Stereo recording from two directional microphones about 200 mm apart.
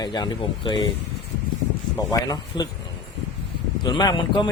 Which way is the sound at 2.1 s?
20° left (ahead or behind).